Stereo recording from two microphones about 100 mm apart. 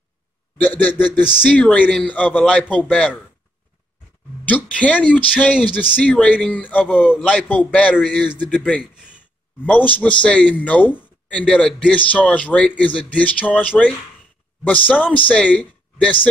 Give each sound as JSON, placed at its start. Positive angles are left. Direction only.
{"t": 0.6, "sound": "a man's voice", "side_deg": 15}
{"t": 4.5, "sound": "a man's voice", "side_deg": 15}
{"t": 9.8, "sound": "a man's voice", "side_deg": 15}